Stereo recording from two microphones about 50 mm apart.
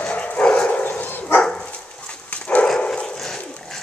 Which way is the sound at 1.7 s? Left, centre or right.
Left.